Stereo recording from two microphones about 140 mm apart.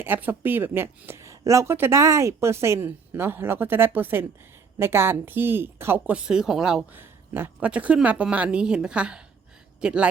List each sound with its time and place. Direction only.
0.0 s speech: 15° right (ahead or behind)
6.2 s speech: 5° right (ahead or behind)